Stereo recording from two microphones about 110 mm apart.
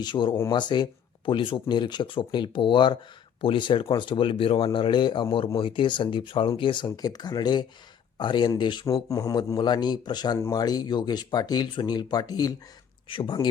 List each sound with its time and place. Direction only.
0.0 s speech: 45° left (ahead or behind)
8.9 s speech: 35° left (ahead or behind)
13.1 s speech: 45° left (ahead or behind)